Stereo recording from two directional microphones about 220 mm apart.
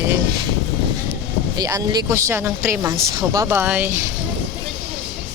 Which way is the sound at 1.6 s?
15° right (ahead or behind).